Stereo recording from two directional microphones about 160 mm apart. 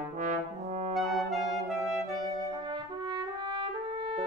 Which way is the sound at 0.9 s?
Centre (ahead or behind).